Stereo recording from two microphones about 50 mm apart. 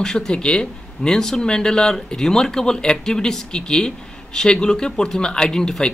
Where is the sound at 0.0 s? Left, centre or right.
Centre.